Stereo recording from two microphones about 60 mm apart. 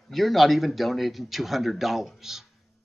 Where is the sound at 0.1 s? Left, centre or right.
Centre.